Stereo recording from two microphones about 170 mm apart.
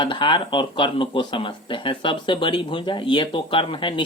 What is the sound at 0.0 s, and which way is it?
Speech, 30° left (ahead or behind).